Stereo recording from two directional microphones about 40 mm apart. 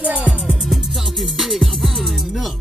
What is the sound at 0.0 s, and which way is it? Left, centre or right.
Music, right.